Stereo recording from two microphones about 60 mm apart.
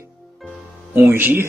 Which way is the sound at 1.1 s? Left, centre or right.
Right.